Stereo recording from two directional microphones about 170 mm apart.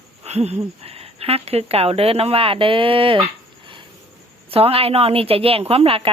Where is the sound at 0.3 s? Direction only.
40° right (ahead or behind).